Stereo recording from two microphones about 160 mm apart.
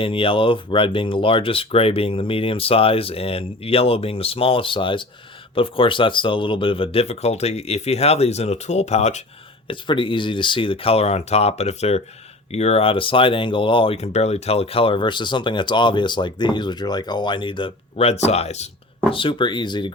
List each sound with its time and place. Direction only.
0.0 s speech: 35° left (ahead or behind)
9.6 s speech: 30° left (ahead or behind)
19.1 s speech: 30° left (ahead or behind)